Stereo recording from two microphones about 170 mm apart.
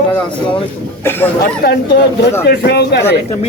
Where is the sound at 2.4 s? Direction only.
75° left (ahead or behind).